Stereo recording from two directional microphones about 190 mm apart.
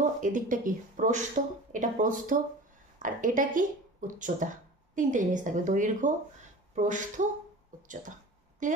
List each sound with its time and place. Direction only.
0.2 s a woman's voice: 45° right (ahead or behind)
8.6 s speech: 40° right (ahead or behind)